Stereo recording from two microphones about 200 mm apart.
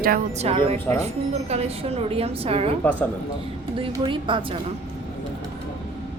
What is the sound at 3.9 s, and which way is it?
Speech, 25° right (ahead or behind).